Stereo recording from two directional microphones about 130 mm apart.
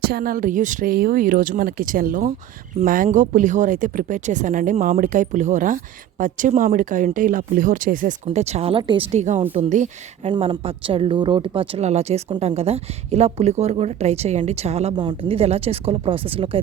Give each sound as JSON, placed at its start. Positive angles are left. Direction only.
{"t": 0.3, "sound": "speech", "side_deg": -90}
{"t": 9.1, "sound": "speech", "side_deg": -65}
{"t": 10.6, "sound": "speech", "side_deg": -45}
{"t": 14.9, "sound": "speech", "side_deg": -35}
{"t": 15.3, "sound": "speech", "side_deg": -50}